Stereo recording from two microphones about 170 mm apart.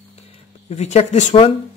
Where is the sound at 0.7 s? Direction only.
40° left (ahead or behind).